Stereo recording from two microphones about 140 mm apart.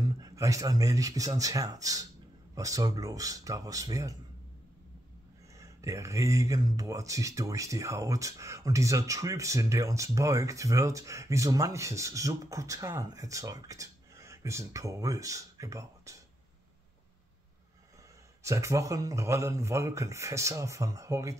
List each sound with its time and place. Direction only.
0.0 s speech: 25° right (ahead or behind)
5.6 s speech: 20° right (ahead or behind)
18.4 s speech: 20° right (ahead or behind)